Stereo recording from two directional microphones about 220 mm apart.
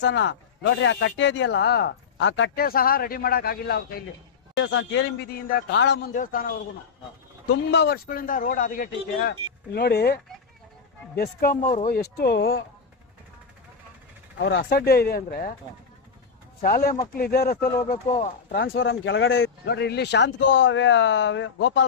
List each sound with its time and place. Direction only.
0.0 s a man's voice: 55° left (ahead or behind)
4.5 s a man's voice: 60° left (ahead or behind)
6.1 s speech: 40° left (ahead or behind)
7.7 s a man's voice: 50° left (ahead or behind)
12.1 s a man's voice: 50° left (ahead or behind)
14.3 s a man's voice: 55° left (ahead or behind)
16.6 s a man's voice: 40° left (ahead or behind)
17.9 s speech: 25° left (ahead or behind)
18.6 s speech: 60° left (ahead or behind)